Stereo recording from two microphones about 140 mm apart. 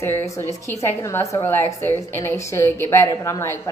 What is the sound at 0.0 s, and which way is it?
A woman's voice, 20° left (ahead or behind).